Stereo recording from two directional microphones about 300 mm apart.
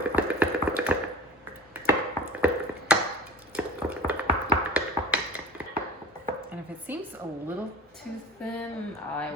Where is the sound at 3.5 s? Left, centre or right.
Centre.